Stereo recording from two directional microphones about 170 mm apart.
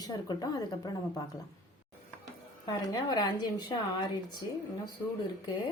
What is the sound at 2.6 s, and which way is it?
A woman's voice, 25° left (ahead or behind).